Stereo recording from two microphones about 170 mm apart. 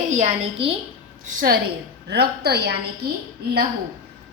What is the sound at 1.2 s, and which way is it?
Speech, 55° right (ahead or behind).